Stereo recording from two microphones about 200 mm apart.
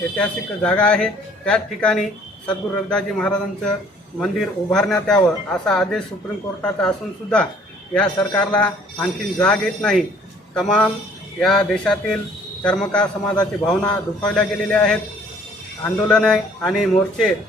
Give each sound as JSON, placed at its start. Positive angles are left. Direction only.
{"t": 0.2, "sound": "a man's voice", "side_deg": 5}
{"t": 13.3, "sound": "a man's voice", "side_deg": 20}
{"t": 14.3, "sound": "a man's voice", "side_deg": 5}